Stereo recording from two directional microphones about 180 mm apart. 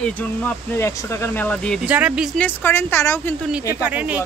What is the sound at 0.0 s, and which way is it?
Speech, 10° left (ahead or behind).